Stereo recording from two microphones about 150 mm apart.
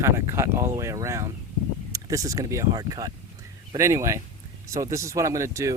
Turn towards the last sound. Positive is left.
turn(degrees=-20)  # may be behind; listen again after turning